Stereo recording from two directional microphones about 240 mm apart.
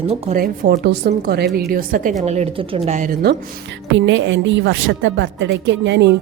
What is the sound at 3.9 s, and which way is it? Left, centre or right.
A woman's voice, right.